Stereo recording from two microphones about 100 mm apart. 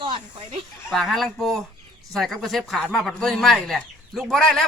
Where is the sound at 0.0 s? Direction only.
55° right (ahead or behind).